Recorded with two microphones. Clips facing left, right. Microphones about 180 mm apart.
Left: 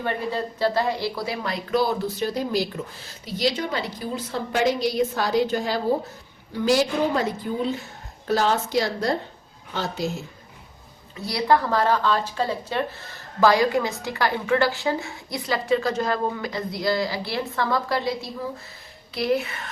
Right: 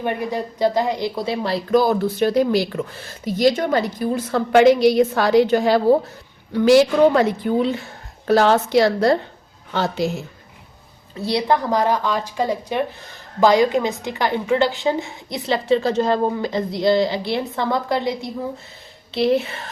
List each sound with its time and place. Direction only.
0.0 s a woman's voice: 15° right (ahead or behind); by 1.6 s 30° right (ahead or behind)
1.7 s a woman's voice: 50° right (ahead or behind); by 2.8 s 65° right (ahead or behind)
3.2 s a woman's voice: 50° right (ahead or behind); by 10.1 s 70° right (ahead or behind)
11.2 s a woman's voice: 25° right (ahead or behind)